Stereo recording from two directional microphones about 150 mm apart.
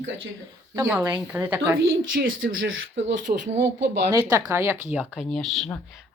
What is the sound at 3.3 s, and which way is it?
Speech, 45° right (ahead or behind).